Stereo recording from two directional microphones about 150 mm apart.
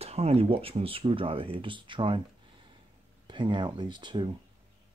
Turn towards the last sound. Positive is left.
turn(degrees=-30)  # may be behind; listen again after turning